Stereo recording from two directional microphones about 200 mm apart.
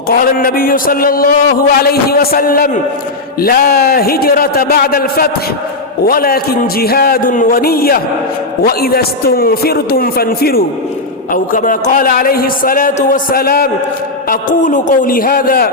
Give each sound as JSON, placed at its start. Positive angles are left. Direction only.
{"t": 0.1, "sound": "a man's voice", "side_deg": 45}